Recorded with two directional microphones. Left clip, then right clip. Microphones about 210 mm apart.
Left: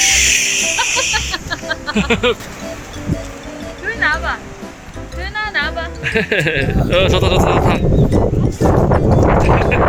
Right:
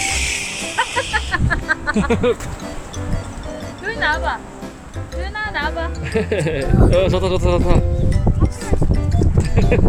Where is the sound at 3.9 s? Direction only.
60° right (ahead or behind).